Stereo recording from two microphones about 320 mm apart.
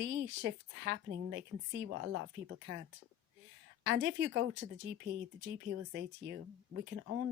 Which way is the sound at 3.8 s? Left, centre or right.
Right.